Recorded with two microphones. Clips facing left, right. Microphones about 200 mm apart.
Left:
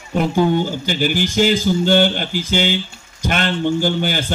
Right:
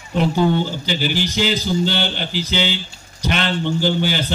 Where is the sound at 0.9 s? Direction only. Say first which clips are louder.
Left 2 dB; 50° left (ahead or behind).